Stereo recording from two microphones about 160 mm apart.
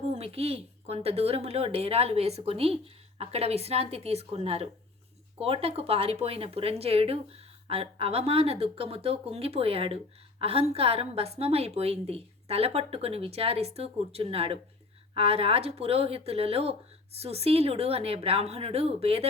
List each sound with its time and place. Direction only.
0.2 s speech: 40° right (ahead or behind)